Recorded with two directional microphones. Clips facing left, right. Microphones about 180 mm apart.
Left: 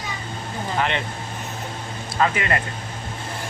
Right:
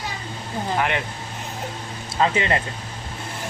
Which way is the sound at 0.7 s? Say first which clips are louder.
Even; 10° right (ahead or behind).